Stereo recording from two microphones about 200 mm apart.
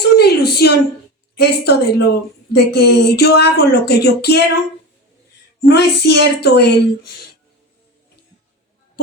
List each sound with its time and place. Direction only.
0.2 s a sound: 50° left (ahead or behind)
1.4 s speech: 55° left (ahead or behind)
5.6 s speech: 55° left (ahead or behind)